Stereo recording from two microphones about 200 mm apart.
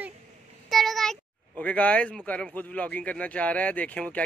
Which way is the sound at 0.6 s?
Centre (ahead or behind).